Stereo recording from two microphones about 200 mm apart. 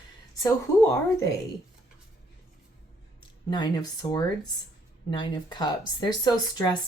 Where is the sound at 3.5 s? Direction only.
20° left (ahead or behind).